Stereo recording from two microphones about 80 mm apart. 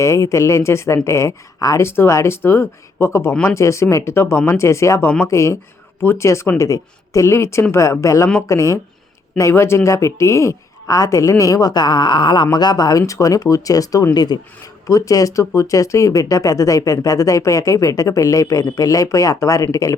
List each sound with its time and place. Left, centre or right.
0.0 s a woman's voice: left
14.1 s speech: left
14.8 s a woman's voice: left